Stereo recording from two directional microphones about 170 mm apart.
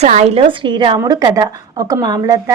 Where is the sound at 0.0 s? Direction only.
40° right (ahead or behind).